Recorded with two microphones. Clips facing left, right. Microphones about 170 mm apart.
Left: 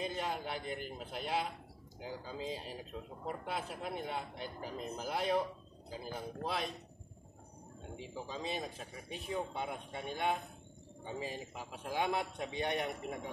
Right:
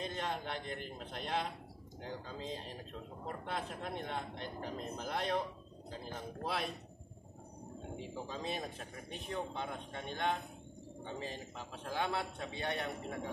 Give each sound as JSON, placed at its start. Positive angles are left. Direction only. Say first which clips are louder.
{"t": 0.0, "sound": "a man's voice", "louder": "left 1 dB", "side_deg": 5}
{"t": 6.4, "sound": "speech", "louder": "even", "side_deg": 0}
{"t": 7.9, "sound": "a man's voice", "louder": "even", "side_deg": 0}